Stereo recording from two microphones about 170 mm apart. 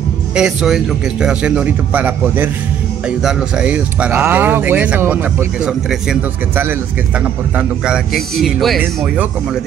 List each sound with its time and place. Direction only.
0.4 s a man's voice: 5° right (ahead or behind)